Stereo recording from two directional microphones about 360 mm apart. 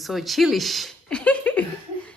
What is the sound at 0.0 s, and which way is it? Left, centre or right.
Speech, centre.